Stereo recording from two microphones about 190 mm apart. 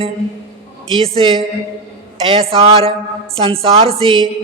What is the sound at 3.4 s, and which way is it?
Speech, 30° right (ahead or behind).